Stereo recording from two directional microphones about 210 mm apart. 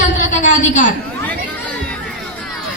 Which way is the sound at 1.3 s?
5° left (ahead or behind).